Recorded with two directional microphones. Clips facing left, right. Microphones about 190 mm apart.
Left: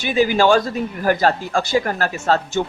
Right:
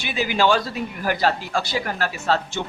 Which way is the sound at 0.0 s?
45° left (ahead or behind).